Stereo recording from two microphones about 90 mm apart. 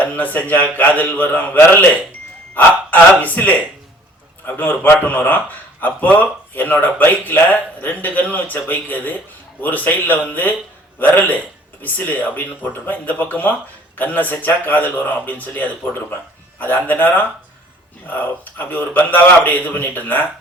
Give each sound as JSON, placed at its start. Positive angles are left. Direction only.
{"t": 0.0, "sound": "a man's voice", "side_deg": 15}